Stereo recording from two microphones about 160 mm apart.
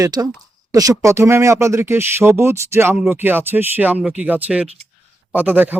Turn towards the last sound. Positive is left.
turn(degrees=-10)  # may be behind; listen again after turning